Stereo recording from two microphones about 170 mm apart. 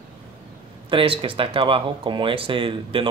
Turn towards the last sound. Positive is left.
turn(degrees=-30)  # may be behind; listen again after turning